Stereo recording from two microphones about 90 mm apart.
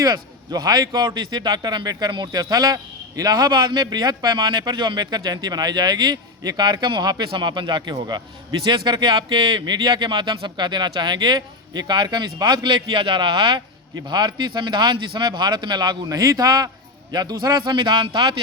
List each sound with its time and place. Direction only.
0.0 s a man's voice: 45° right (ahead or behind); by 13.6 s 65° right (ahead or behind)
14.1 s a man's voice: 55° right (ahead or behind)